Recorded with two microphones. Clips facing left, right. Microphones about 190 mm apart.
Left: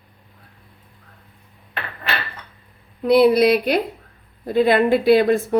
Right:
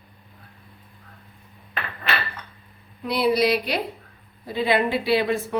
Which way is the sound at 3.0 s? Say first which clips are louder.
Left 7 dB; 55° left (ahead or behind).